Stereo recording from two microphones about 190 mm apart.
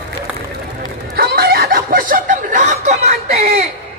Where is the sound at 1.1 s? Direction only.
55° right (ahead or behind); by 3.7 s 35° right (ahead or behind).